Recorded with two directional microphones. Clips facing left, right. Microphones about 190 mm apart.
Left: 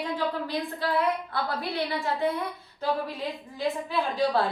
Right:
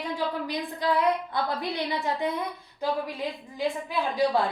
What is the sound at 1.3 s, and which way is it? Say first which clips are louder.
Speech: right 1 dB; 20° right (ahead or behind).